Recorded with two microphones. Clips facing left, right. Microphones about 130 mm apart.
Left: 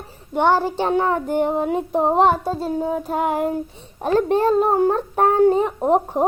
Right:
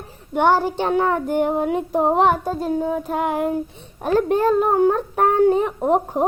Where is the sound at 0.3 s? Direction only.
Centre (ahead or behind).